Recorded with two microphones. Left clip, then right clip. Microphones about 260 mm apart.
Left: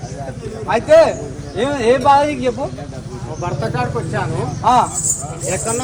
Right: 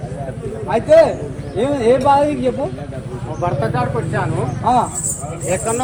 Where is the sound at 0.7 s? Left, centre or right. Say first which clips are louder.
Even; centre.